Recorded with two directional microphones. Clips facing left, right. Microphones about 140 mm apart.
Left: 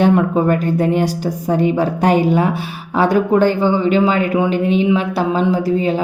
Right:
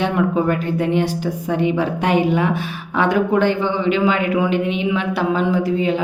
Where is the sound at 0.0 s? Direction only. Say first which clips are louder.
Left 4 dB; 40° left (ahead or behind).